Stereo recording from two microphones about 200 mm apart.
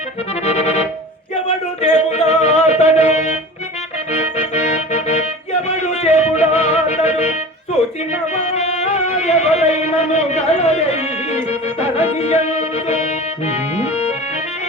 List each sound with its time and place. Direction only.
0.4 s accordion: 35° left (ahead or behind)
1.5 s music: 35° left (ahead or behind)
8.4 s music: 35° left (ahead or behind)